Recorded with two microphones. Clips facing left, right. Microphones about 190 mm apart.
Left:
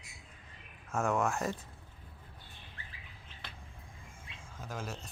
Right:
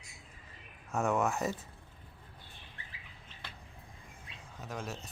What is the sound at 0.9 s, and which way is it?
Speech, centre (ahead or behind).